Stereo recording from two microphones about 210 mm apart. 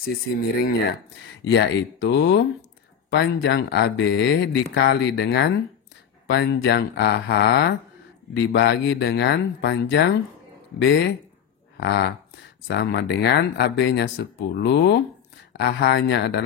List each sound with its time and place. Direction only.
0.0 s speech: 45° left (ahead or behind)
11.7 s dog: 50° left (ahead or behind)
12.6 s speech: 55° left (ahead or behind)